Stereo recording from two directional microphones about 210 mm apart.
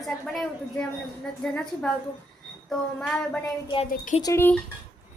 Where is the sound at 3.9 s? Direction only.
40° left (ahead or behind).